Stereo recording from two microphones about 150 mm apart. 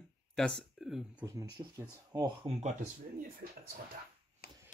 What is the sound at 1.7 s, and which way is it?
Speech, 25° right (ahead or behind).